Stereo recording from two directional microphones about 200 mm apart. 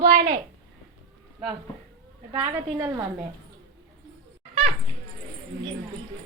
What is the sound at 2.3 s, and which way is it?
Speech, 10° right (ahead or behind).